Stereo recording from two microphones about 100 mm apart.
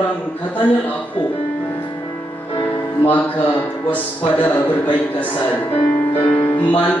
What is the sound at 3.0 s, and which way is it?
Speech, 15° left (ahead or behind).